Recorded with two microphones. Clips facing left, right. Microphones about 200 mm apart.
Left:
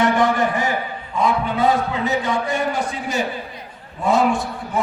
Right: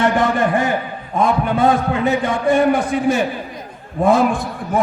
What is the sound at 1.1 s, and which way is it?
A man's voice, 50° right (ahead or behind).